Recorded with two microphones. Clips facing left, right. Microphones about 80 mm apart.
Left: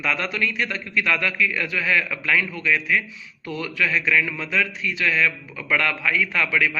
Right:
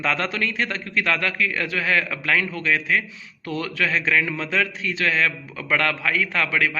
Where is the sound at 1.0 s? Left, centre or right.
Centre.